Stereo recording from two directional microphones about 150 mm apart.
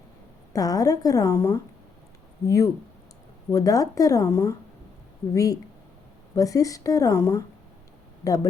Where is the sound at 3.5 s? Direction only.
25° left (ahead or behind).